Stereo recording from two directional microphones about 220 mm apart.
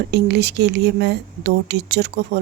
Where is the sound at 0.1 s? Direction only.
50° right (ahead or behind).